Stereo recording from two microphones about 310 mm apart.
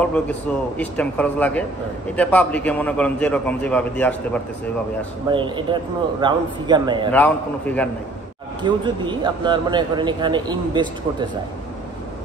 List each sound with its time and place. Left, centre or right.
0.0 s a man's voice: centre
5.3 s speech: centre
7.1 s a man's voice: centre
8.6 s speech: centre